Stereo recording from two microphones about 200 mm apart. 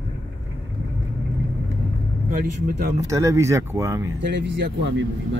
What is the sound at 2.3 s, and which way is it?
Speech, 50° right (ahead or behind).